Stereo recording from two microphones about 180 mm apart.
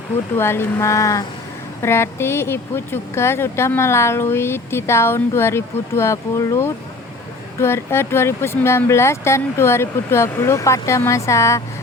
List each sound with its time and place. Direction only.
0.3 s speech: 15° left (ahead or behind)